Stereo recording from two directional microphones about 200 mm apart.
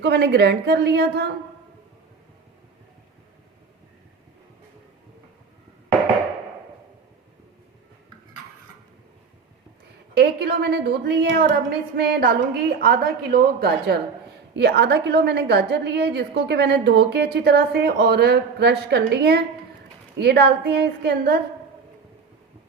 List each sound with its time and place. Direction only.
0.0 s a woman's voice: 55° right (ahead or behind)
10.2 s a woman's voice: 55° right (ahead or behind)